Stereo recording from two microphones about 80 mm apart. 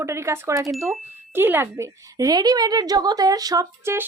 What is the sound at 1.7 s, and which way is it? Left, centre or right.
A woman's voice, right.